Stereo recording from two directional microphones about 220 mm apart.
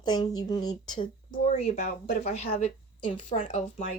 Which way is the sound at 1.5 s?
30° left (ahead or behind).